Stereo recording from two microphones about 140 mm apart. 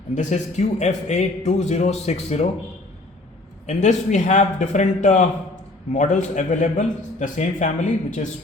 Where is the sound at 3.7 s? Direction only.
55° left (ahead or behind).